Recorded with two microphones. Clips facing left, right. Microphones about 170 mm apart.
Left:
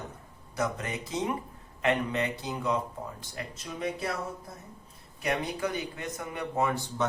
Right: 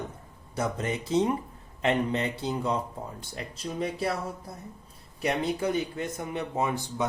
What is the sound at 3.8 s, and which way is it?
Speech, 30° right (ahead or behind).